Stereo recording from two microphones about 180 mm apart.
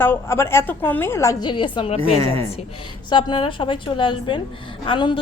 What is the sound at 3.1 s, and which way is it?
A woman's voice, 25° left (ahead or behind).